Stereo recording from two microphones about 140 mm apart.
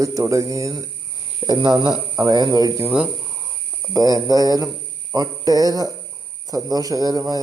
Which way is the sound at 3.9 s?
25° right (ahead or behind).